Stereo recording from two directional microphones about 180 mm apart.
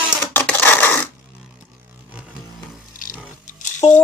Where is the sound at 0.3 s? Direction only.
10° left (ahead or behind).